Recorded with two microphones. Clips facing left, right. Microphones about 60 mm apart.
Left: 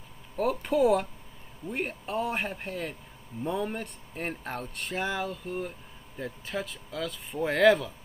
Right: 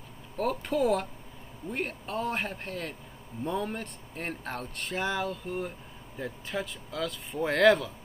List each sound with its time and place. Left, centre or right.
0.4 s speech: centre